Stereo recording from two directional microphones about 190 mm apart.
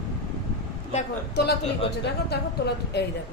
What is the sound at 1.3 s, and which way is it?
A man's voice, 60° left (ahead or behind).